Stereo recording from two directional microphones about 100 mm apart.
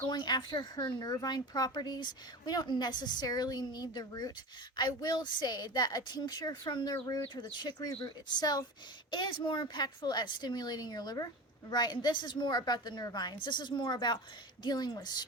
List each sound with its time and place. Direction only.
0.0 s speech: 45° left (ahead or behind)